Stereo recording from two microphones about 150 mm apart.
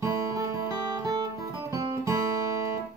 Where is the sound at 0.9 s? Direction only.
20° right (ahead or behind).